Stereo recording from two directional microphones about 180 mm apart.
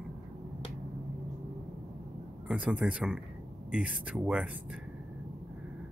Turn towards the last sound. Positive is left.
turn(degrees=-5)  # may be behind; listen again after turning